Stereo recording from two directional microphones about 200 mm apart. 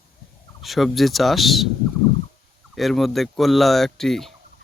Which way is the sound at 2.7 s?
Centre (ahead or behind).